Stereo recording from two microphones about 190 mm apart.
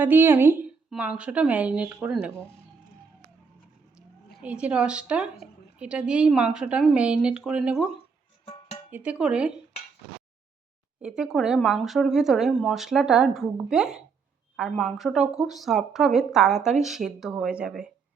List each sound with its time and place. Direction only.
0.0 s a woman's voice: 10° right (ahead or behind)
4.4 s a woman's voice: 5° right (ahead or behind)
8.9 s a woman's voice: 5° right (ahead or behind)
11.0 s a woman's voice: 5° right (ahead or behind)